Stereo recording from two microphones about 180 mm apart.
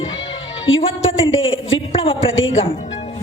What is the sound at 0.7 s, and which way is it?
Speech, 90° left.